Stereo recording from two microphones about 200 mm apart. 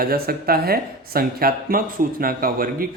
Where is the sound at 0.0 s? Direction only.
50° right (ahead or behind).